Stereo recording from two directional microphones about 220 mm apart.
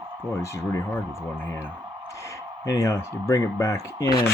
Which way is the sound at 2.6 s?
15° left (ahead or behind).